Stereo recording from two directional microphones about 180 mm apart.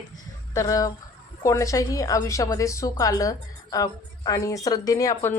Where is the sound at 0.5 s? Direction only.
20° left (ahead or behind).